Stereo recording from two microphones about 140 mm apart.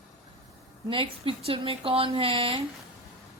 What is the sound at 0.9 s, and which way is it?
Speech, 40° right (ahead or behind).